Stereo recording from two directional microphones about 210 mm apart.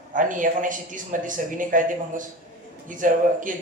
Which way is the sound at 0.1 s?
40° right (ahead or behind).